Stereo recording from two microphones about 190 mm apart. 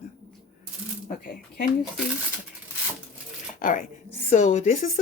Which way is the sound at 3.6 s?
45° left (ahead or behind).